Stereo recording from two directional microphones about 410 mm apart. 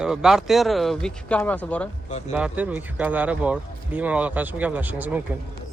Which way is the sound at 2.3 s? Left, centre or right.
Centre.